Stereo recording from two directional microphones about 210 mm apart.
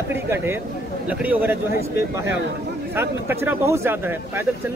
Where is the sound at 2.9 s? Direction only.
10° right (ahead or behind).